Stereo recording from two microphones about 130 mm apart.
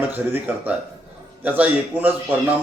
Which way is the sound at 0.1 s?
15° right (ahead or behind).